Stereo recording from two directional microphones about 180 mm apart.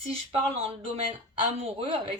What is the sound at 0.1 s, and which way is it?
Speech, 35° right (ahead or behind).